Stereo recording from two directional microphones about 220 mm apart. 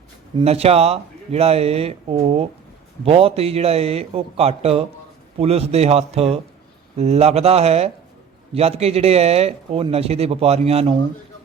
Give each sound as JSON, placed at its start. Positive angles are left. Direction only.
{"t": 0.3, "sound": "speech", "side_deg": -25}